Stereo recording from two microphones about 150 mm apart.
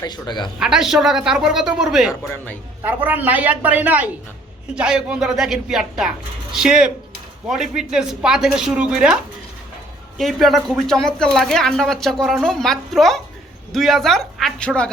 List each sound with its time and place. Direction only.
0.0 s speech: 30° left (ahead or behind)
0.6 s speech: 5° right (ahead or behind)
10.2 s speech: centre (ahead or behind)